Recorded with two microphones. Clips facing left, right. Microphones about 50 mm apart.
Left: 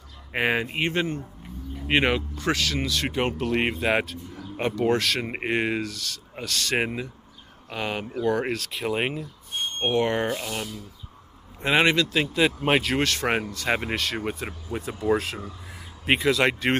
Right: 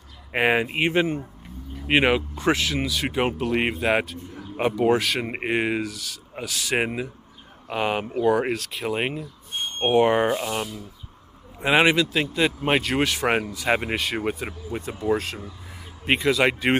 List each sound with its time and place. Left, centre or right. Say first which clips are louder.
0.3 s speech: right 3 dB; centre
2.3 s speech: right 3 dB; right; by 9.3 s centre
9.8 s speech: right 5 dB; centre